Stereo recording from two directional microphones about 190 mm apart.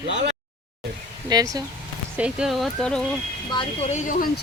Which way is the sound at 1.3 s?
20° right (ahead or behind).